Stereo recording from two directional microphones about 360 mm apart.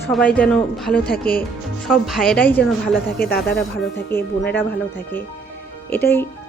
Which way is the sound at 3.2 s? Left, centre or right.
Left.